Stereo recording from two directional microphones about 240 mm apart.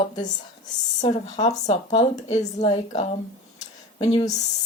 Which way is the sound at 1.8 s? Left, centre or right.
Left.